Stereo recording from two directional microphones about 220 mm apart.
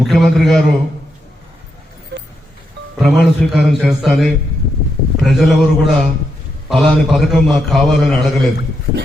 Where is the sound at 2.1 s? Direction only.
50° right (ahead or behind).